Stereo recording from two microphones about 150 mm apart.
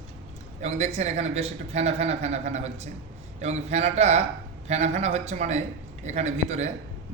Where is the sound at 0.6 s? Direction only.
45° right (ahead or behind).